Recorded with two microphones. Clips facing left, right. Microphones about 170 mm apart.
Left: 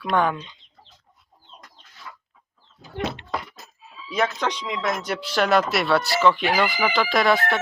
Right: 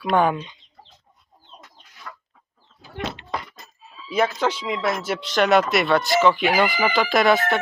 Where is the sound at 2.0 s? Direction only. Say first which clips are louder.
Right 2 dB; 55° right (ahead or behind).